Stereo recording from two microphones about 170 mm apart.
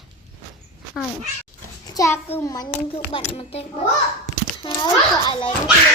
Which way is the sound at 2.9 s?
35° left (ahead or behind).